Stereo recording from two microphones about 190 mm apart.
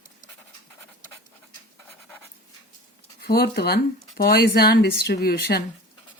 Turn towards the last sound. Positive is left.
turn(degrees=55)  # may be behind; listen again after turning